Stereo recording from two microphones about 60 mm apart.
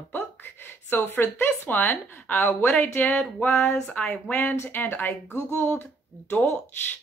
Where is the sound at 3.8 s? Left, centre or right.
Centre; by 6.5 s left.